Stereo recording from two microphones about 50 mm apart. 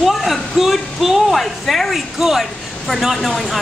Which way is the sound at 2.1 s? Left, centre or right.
Centre.